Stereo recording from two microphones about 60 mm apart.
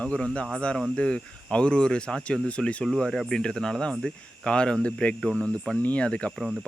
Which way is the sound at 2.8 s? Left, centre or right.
Centre.